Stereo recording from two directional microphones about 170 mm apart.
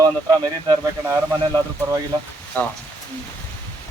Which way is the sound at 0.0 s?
25° right (ahead or behind).